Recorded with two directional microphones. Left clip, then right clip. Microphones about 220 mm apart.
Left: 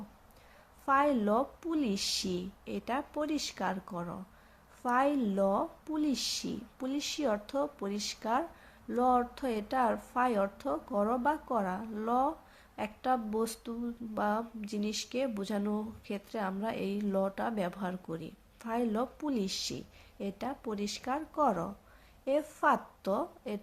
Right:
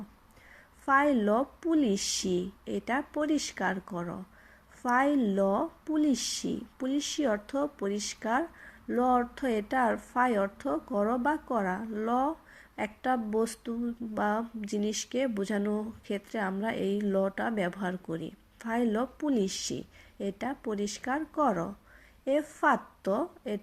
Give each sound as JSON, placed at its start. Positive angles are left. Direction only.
{"t": 0.9, "sound": "a woman's voice", "side_deg": -10}